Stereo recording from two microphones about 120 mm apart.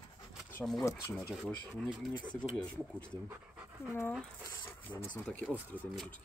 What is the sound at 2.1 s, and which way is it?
Speech, 50° left (ahead or behind).